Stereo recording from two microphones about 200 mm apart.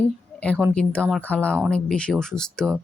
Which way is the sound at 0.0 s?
5° left (ahead or behind).